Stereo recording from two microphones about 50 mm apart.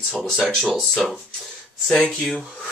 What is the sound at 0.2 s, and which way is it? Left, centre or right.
Speech, centre.